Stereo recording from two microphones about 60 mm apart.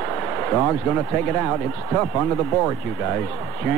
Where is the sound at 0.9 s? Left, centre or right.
Centre.